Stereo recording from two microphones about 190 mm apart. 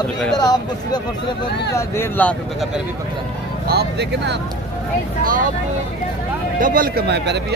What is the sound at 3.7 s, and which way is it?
Speech, 60° right (ahead or behind).